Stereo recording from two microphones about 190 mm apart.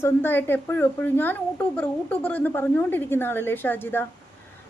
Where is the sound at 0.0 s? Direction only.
10° left (ahead or behind).